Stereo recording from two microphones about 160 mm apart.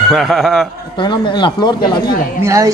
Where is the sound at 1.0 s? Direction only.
30° left (ahead or behind).